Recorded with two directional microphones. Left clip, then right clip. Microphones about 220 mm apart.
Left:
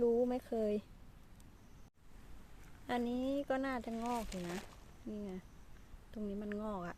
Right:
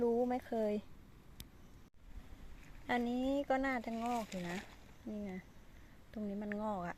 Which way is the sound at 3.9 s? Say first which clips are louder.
Right 1 dB; 20° left (ahead or behind).